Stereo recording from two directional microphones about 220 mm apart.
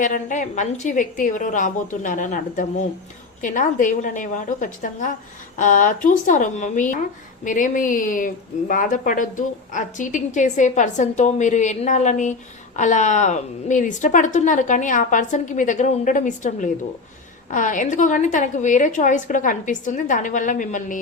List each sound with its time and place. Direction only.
0.0 s a woman's voice: 35° left (ahead or behind)